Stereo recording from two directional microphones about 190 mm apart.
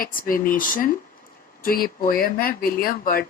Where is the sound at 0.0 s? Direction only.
45° left (ahead or behind).